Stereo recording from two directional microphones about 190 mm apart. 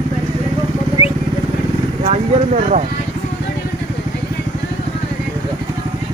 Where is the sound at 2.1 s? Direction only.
40° right (ahead or behind).